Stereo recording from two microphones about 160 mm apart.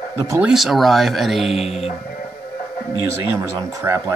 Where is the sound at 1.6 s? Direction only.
40° left (ahead or behind).